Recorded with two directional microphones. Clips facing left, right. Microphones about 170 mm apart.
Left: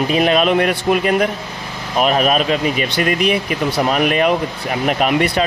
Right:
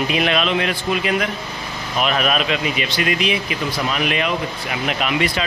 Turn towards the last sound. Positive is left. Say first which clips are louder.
# left 5 dB
turn(degrees=50)  # may be behind; listen again after turning